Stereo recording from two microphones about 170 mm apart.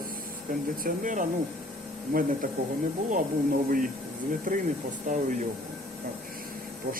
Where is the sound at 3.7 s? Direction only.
55° right (ahead or behind).